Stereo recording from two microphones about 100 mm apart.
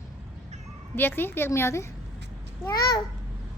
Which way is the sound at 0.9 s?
20° left (ahead or behind).